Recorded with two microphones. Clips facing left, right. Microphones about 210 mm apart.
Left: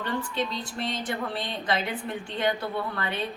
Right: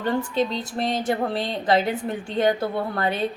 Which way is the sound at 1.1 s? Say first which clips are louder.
Right 7 dB; 40° right (ahead or behind).